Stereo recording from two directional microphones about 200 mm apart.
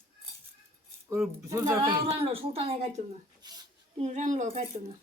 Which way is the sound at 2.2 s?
30° right (ahead or behind).